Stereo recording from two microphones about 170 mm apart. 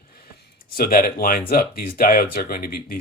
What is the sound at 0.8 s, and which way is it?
Speech, 60° left (ahead or behind).